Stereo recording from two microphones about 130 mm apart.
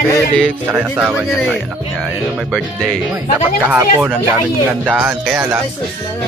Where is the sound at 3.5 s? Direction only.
10° right (ahead or behind).